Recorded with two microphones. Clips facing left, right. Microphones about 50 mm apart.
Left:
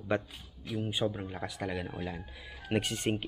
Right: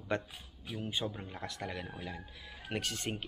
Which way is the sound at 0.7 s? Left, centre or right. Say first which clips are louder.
Left 5 dB; centre.